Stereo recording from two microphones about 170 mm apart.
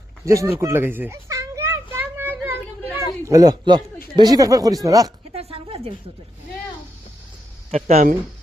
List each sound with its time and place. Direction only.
0.3 s children playing: 15° right (ahead or behind)
3.2 s speech: 20° right (ahead or behind)
5.3 s a sound: 35° right (ahead or behind)
7.7 s speech: 40° right (ahead or behind)